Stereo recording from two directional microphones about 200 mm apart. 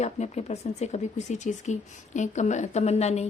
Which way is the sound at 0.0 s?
35° left (ahead or behind).